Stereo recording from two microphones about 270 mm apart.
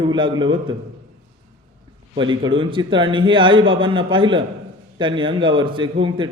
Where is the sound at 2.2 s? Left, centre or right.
Centre.